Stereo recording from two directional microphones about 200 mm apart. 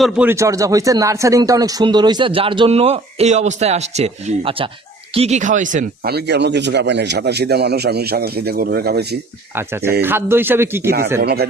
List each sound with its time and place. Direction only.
0.0 s speech: 10° right (ahead or behind); by 9.0 s 50° right (ahead or behind)
10.0 s a man's voice: 10° right (ahead or behind)
11.2 s speech: 55° right (ahead or behind)